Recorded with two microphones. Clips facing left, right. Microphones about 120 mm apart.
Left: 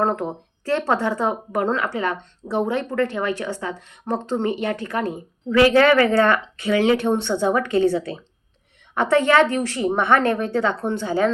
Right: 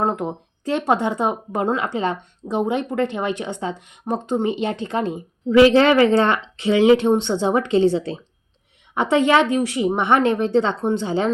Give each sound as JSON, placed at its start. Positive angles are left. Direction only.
{"t": 0.0, "sound": "speech", "side_deg": -15}